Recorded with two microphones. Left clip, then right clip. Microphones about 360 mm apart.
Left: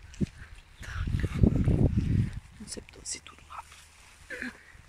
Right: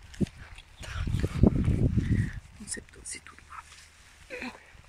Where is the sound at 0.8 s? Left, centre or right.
Centre.